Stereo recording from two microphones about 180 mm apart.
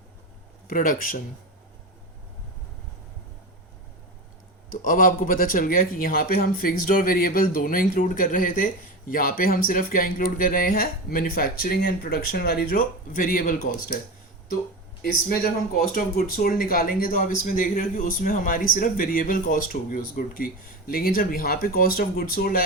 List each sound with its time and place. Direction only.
0.7 s speech: 50° left (ahead or behind)
4.7 s speech: 50° left (ahead or behind)
15.0 s speech: 55° left (ahead or behind)